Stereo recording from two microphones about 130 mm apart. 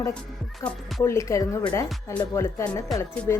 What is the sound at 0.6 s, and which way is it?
Speech, centre (ahead or behind).